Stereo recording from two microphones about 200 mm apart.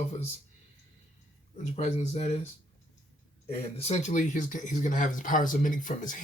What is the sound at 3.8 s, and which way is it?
Speech, 30° left (ahead or behind).